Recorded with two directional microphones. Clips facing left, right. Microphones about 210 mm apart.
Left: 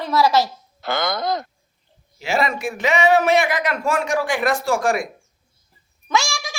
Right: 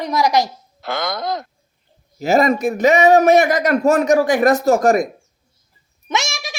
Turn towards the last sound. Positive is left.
turn(degrees=-20)  # may be behind; listen again after turning